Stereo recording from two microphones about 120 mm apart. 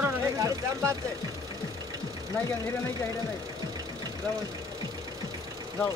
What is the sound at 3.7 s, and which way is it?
Vehicle, 35° right (ahead or behind).